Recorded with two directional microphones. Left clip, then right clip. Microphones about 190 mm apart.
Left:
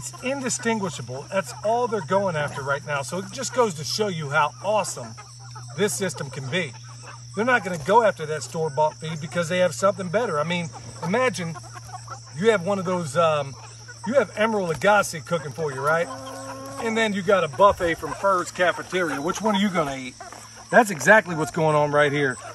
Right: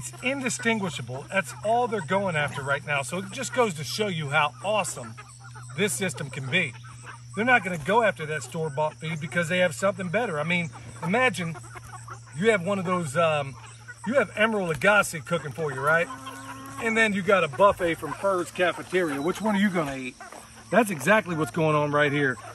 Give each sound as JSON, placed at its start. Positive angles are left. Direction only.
{"t": 0.2, "sound": "speech", "side_deg": 15}